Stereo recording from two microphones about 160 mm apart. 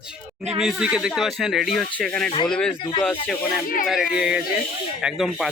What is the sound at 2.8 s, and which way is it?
Speech, 30° left (ahead or behind).